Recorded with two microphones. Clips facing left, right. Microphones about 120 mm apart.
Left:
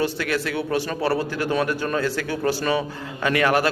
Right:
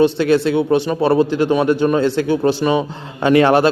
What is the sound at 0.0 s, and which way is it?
A man's voice, 25° right (ahead or behind).